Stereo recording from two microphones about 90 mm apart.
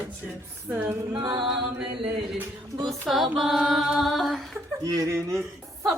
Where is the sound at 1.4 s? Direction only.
15° right (ahead or behind).